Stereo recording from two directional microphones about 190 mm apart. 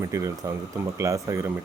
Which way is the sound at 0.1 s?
15° right (ahead or behind).